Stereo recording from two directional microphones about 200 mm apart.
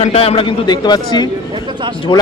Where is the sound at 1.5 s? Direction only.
25° right (ahead or behind).